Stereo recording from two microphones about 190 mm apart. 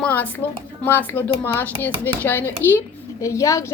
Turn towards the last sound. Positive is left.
turn(degrees=15)  # may be behind; listen again after turning